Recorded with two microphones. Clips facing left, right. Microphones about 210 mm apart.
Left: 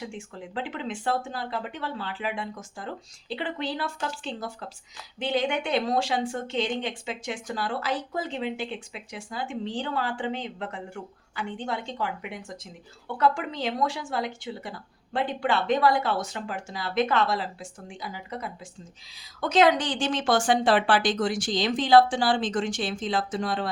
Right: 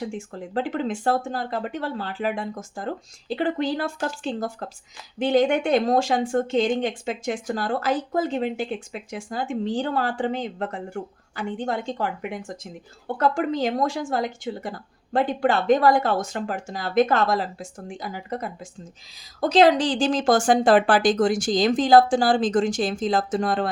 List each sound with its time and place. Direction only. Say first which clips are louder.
0.0 s speech: right 6 dB; 45° right (ahead or behind)
19.4 s speech: right 4 dB; 35° right (ahead or behind)